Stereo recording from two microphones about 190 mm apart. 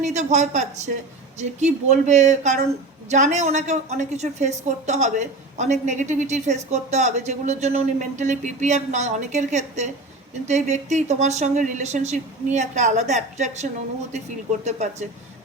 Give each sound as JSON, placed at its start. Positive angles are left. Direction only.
{"t": 0.0, "sound": "a woman's voice", "side_deg": -35}